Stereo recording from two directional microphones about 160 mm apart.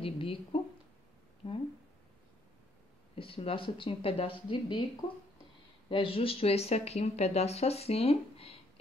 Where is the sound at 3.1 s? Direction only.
35° left (ahead or behind).